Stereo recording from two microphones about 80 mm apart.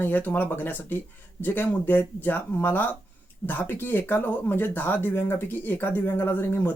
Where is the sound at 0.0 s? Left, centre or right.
Left.